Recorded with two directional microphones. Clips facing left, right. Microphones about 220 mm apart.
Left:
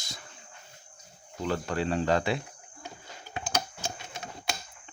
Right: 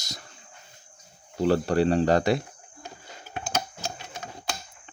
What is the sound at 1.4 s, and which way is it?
Speech, 35° right (ahead or behind).